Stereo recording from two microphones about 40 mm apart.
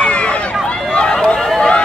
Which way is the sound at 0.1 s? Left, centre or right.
Left.